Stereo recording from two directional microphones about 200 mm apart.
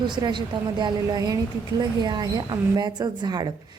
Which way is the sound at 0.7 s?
20° right (ahead or behind).